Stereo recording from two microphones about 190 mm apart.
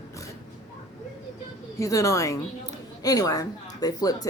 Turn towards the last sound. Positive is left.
turn(degrees=20)  # may be behind; listen again after turning